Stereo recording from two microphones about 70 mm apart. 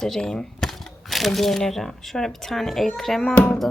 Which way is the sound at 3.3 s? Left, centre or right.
Left.